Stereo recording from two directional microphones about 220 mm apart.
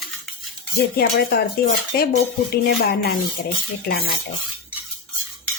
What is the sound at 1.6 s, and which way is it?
A woman's voice, 50° left (ahead or behind).